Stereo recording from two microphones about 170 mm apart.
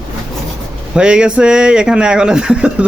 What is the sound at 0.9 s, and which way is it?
Speech, 5° right (ahead or behind).